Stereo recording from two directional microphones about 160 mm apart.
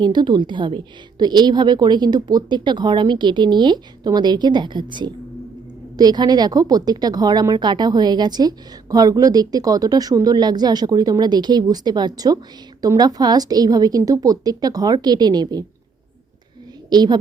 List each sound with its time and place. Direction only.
0.0 s a woman's voice: 25° right (ahead or behind)
16.9 s a woman's voice: 25° right (ahead or behind)